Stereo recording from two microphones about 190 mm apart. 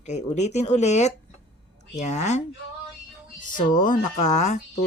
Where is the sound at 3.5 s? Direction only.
45° left (ahead or behind).